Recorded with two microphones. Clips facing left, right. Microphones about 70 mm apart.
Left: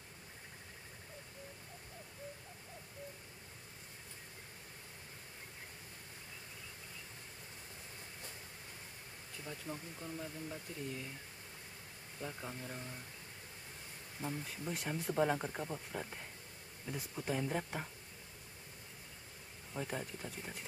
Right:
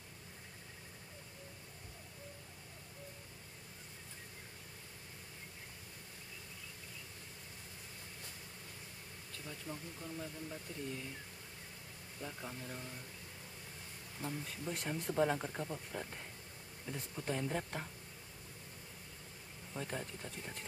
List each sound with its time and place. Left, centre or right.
9.5 s speech: centre
12.2 s speech: centre
14.2 s speech: centre
19.7 s speech: centre